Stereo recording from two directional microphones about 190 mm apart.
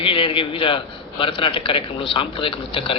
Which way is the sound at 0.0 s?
30° left (ahead or behind).